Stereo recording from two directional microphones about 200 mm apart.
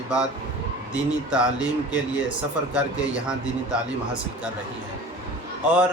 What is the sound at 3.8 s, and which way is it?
Speech, 5° right (ahead or behind).